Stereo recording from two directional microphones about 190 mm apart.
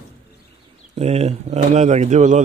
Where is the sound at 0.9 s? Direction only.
35° right (ahead or behind).